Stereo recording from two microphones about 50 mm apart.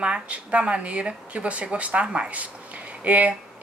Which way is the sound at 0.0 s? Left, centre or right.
Right.